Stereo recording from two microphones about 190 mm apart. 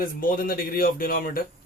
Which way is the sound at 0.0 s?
50° left (ahead or behind).